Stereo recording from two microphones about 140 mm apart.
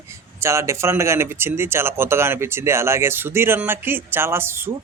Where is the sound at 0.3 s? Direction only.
20° right (ahead or behind).